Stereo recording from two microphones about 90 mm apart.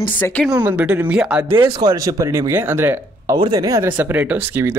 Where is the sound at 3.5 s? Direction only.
40° right (ahead or behind).